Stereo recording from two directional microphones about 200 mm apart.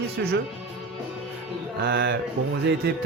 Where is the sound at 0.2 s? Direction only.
50° right (ahead or behind).